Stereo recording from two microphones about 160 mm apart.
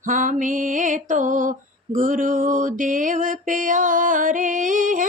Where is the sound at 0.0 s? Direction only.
55° right (ahead or behind).